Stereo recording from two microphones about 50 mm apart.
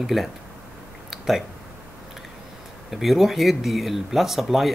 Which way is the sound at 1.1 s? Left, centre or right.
Centre.